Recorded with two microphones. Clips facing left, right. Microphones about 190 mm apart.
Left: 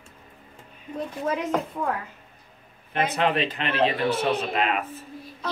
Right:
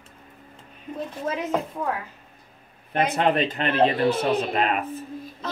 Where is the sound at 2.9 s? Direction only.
45° right (ahead or behind).